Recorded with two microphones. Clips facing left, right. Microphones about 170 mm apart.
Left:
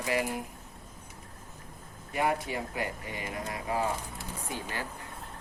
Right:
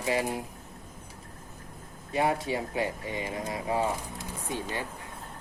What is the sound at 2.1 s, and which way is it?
Speech, 25° right (ahead or behind).